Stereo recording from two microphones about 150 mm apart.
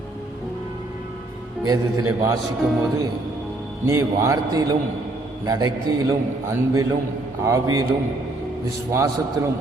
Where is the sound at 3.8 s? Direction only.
20° right (ahead or behind).